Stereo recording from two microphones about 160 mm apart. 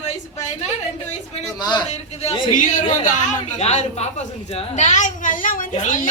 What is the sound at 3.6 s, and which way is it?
Speech, 45° left (ahead or behind).